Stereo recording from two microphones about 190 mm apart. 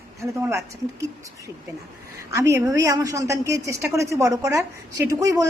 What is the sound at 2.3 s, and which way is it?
A woman's voice, 15° right (ahead or behind).